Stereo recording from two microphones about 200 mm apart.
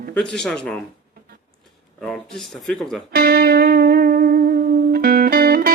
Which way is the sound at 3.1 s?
50° right (ahead or behind).